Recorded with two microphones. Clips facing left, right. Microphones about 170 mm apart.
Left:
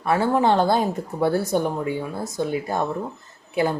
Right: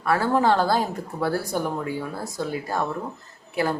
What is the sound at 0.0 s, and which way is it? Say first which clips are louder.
A woman's voice: left 1 dB; 20° left (ahead or behind).